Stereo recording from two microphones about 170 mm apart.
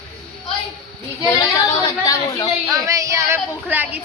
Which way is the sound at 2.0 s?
20° left (ahead or behind).